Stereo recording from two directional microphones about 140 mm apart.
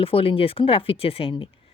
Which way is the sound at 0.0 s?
40° left (ahead or behind).